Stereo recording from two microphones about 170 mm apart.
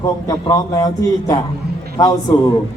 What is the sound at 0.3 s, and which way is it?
A man's voice, 20° left (ahead or behind).